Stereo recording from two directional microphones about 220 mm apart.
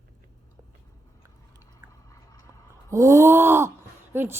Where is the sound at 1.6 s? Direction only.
15° left (ahead or behind).